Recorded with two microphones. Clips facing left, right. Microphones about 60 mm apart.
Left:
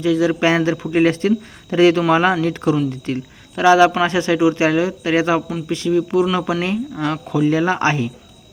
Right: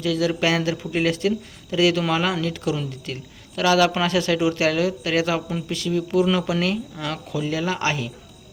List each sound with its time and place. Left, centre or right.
0.0 s a man's voice: left
5.9 s speech: centre